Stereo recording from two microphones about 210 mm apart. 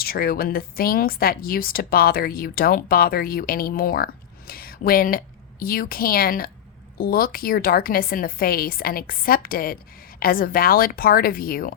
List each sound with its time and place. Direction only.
0.0 s a woman's voice: 45° left (ahead or behind)